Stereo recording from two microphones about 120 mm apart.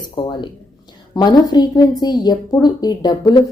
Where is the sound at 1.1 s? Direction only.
35° left (ahead or behind).